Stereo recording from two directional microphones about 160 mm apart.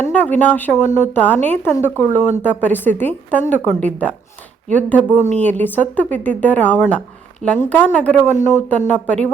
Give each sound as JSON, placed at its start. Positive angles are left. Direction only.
{"t": 0.0, "sound": "a woman's voice", "side_deg": 10}